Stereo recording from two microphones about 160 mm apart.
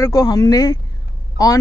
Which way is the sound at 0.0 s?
25° left (ahead or behind).